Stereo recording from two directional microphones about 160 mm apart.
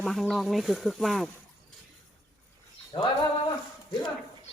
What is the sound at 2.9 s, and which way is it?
Speech, 30° left (ahead or behind).